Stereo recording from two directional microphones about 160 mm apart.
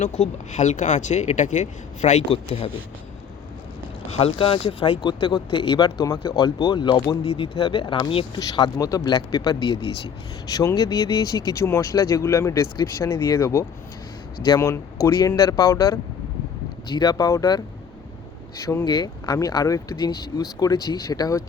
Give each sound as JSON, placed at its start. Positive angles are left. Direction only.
{"t": 0.0, "sound": "speech", "side_deg": 45}
{"t": 4.1, "sound": "speech", "side_deg": 35}
{"t": 15.3, "sound": "speech", "side_deg": 20}
{"t": 18.6, "sound": "speech", "side_deg": 15}